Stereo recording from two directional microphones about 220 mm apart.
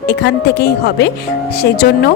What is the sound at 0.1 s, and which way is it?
Speech, 50° left (ahead or behind).